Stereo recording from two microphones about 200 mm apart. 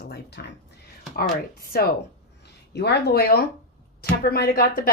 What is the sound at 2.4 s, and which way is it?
A woman's voice, 55° left (ahead or behind).